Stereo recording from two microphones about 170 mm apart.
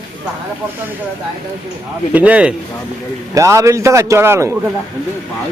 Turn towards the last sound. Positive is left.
turn(degrees=-15)  # may be behind; listen again after turning